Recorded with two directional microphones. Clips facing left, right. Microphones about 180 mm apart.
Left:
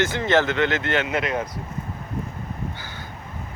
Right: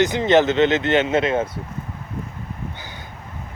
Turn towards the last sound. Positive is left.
turn(degrees=-20)  # may be behind; listen again after turning